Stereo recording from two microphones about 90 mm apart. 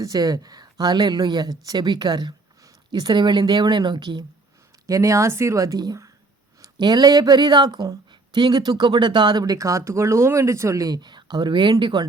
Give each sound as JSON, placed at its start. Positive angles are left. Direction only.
{"t": 0.0, "sound": "speech", "side_deg": -45}
{"t": 4.9, "sound": "speech", "side_deg": -35}